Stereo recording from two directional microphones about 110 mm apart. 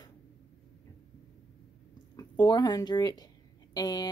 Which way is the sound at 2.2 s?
40° left (ahead or behind).